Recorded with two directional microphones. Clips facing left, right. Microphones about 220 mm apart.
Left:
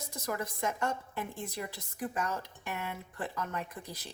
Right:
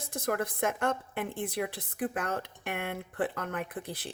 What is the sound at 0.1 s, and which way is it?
A woman's voice, 55° right (ahead or behind).